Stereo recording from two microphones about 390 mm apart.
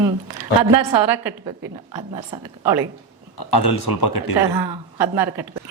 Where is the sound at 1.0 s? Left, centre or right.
Right.